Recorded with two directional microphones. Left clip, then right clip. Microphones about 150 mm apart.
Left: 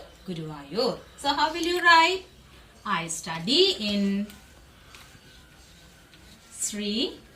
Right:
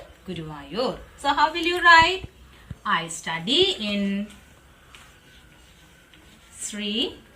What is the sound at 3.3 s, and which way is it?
Speech, 15° left (ahead or behind).